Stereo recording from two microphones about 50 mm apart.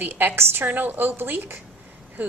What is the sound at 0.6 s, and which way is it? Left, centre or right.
A woman's voice, right.